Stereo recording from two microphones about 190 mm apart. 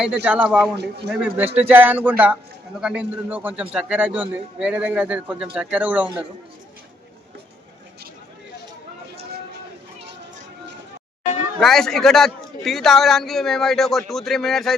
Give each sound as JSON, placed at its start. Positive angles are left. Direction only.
{"t": 0.3, "sound": "a man's voice", "side_deg": -10}
{"t": 0.8, "sound": "a man's voice", "side_deg": -60}
{"t": 1.1, "sound": "a man's voice", "side_deg": -5}
{"t": 11.6, "sound": "a man's voice", "side_deg": 0}